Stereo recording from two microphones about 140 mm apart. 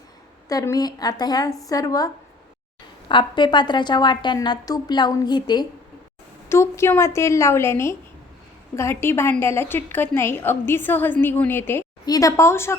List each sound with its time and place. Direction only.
0.4 s a woman's voice: 25° left (ahead or behind)
3.1 s a woman's voice: 35° left (ahead or behind)
6.5 s a woman's voice: 20° left (ahead or behind)